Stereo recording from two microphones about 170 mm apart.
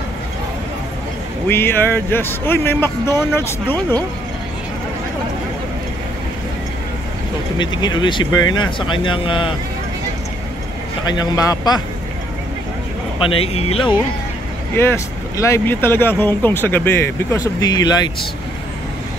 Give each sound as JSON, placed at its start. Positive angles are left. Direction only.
{"t": 1.5, "sound": "speech", "side_deg": 15}
{"t": 7.5, "sound": "speech", "side_deg": 25}
{"t": 11.1, "sound": "speech", "side_deg": 25}
{"t": 13.3, "sound": "speech", "side_deg": 35}
{"t": 14.8, "sound": "speech", "side_deg": 15}